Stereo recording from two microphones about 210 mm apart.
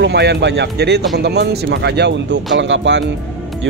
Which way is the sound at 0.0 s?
55° right (ahead or behind).